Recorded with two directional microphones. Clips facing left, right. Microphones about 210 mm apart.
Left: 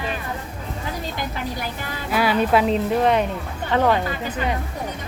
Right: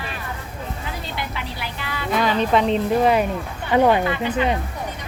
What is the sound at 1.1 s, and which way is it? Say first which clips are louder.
Vehicle: left 2 dB; 45° left (ahead or behind).